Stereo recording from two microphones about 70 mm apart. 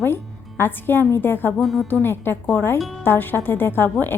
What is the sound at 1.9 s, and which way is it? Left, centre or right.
A woman's voice, left.